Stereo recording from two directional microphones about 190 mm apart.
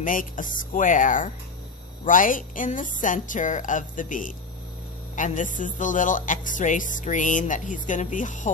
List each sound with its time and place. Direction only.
0.0 s speech: 45° left (ahead or behind)